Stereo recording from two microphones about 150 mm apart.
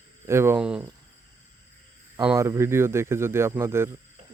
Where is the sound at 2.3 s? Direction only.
20° right (ahead or behind).